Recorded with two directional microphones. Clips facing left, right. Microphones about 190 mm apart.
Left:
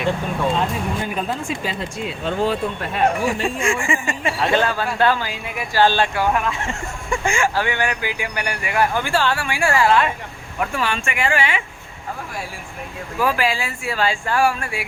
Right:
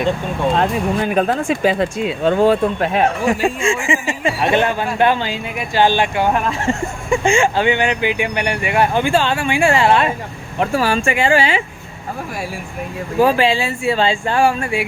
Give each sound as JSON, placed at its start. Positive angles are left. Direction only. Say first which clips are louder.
{"t": 0.5, "sound": "speech", "louder": "right 5 dB", "side_deg": -70}
{"t": 2.2, "sound": "speech", "louder": "right 8 dB", "side_deg": -55}
{"t": 3.6, "sound": "speech", "louder": "right 3 dB", "side_deg": -25}
{"t": 6.2, "sound": "speech", "louder": "right 4 dB", "side_deg": -35}
{"t": 7.1, "sound": "speech", "louder": "right 6 dB", "side_deg": -25}
{"t": 10.6, "sound": "speech", "louder": "right 6 dB", "side_deg": -35}
{"t": 13.1, "sound": "speech", "louder": "right 6 dB", "side_deg": -30}